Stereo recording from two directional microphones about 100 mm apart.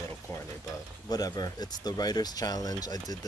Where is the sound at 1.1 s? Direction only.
40° left (ahead or behind).